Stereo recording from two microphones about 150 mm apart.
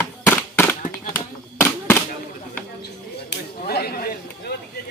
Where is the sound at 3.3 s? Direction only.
90° left.